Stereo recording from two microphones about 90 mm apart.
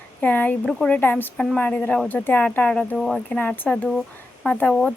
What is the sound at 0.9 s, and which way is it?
Speech, 20° left (ahead or behind).